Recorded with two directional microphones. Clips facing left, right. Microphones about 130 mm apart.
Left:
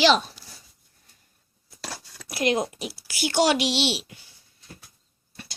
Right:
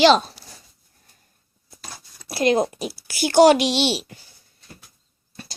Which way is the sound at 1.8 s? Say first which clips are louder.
Left 4 dB; 90° left.